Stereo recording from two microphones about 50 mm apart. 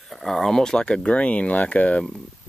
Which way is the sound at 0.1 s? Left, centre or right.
Centre.